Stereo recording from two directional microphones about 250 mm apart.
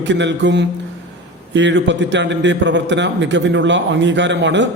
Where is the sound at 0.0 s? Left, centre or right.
Right.